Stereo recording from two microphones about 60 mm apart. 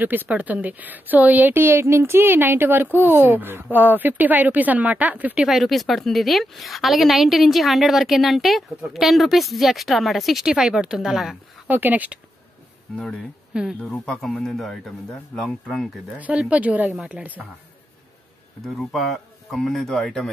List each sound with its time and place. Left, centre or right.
0.0 s speech: right
1.5 s speech: right
5.4 s a woman's voice: centre
11.6 s speech: right
12.9 s a man's voice: centre
13.5 s speech: centre
13.9 s a man's voice: centre
16.2 s speech: right
16.9 s a woman's voice: centre
18.7 s a woman's voice: centre